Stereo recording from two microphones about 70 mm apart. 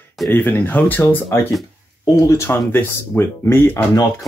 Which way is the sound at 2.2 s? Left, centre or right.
Left.